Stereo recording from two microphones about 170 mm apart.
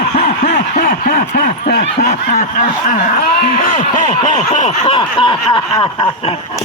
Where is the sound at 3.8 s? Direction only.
40° left (ahead or behind).